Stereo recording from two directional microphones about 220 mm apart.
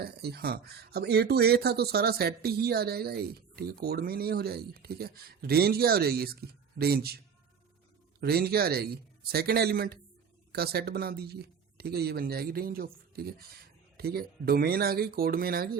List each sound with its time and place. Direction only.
0.0 s speech: 45° right (ahead or behind)
8.2 s speech: 45° right (ahead or behind)